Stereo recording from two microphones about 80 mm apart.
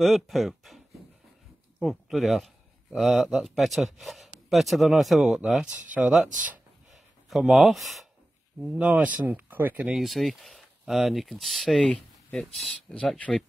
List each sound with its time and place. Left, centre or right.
0.0 s a man's voice: centre
6.9 s a sound: centre
8.6 s speech: centre
9.8 s speech: centre